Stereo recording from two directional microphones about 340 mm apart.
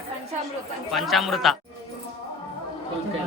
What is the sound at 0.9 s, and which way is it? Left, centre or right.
Speech, centre.